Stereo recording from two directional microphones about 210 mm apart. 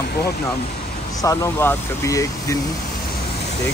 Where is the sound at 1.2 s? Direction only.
15° left (ahead or behind).